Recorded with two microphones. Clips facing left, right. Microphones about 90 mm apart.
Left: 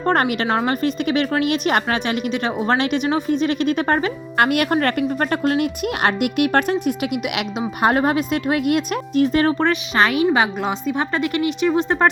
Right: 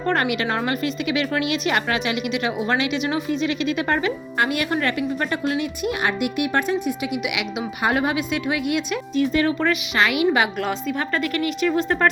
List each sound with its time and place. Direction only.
0.1 s speech: 45° left (ahead or behind)
0.4 s speech: 25° left (ahead or behind)
0.7 s a woman's voice: 40° left (ahead or behind)
2.7 s a woman's voice: 50° left (ahead or behind)
4.4 s a woman's voice: 55° left (ahead or behind)
7.8 s a woman's voice: 45° left (ahead or behind)
9.6 s a woman's voice: 30° left (ahead or behind)
10.6 s a woman's voice: 5° left (ahead or behind)
10.9 s speech: 25° left (ahead or behind)